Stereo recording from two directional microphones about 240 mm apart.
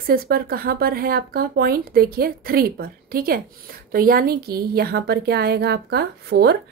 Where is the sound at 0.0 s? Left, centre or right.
Right.